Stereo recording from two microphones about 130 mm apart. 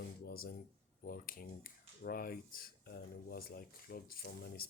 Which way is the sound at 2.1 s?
90° left.